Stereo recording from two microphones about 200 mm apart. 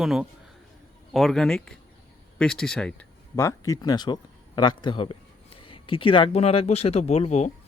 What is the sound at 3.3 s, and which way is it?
Speech, 15° left (ahead or behind).